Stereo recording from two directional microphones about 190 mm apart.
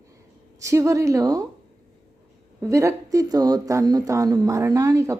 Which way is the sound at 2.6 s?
15° right (ahead or behind).